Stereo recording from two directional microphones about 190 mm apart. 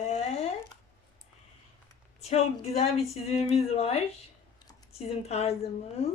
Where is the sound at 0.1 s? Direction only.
30° left (ahead or behind).